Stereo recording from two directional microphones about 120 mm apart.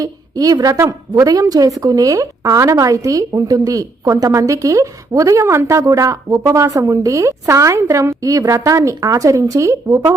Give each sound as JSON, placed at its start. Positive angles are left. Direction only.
{"t": 0.0, "sound": "a woman's voice", "side_deg": -30}